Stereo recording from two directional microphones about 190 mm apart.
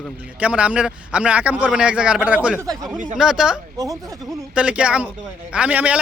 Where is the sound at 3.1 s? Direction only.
5° right (ahead or behind).